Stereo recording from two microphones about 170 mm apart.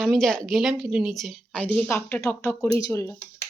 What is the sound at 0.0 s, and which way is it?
Speech, centre (ahead or behind).